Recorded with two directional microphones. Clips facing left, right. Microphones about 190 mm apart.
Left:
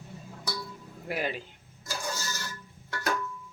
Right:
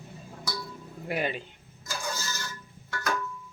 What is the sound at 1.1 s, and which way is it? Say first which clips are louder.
Speech: right 2 dB; centre (ahead or behind).